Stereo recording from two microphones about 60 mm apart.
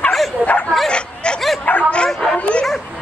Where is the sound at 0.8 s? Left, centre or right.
Centre.